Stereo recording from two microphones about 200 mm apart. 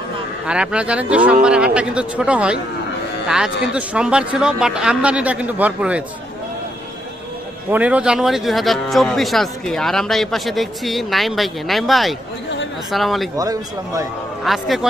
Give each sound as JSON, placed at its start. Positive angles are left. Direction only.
{"t": 0.5, "sound": "speech", "side_deg": -5}
{"t": 7.7, "sound": "speech", "side_deg": -5}
{"t": 13.4, "sound": "speech", "side_deg": -15}
{"t": 14.4, "sound": "speech", "side_deg": 0}